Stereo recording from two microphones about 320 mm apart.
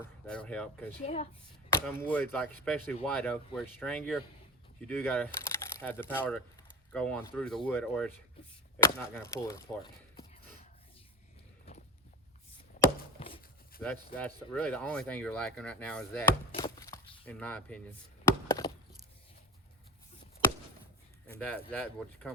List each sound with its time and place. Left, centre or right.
0.0 s speech: centre
1.0 s speech: centre
1.7 s speech: centre
13.1 s a sound: centre
13.8 s speech: centre
18.3 s chop: centre
21.3 s speech: centre